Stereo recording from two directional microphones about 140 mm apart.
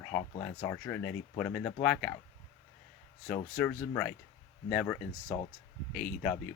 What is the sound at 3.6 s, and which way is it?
Speech, 10° left (ahead or behind).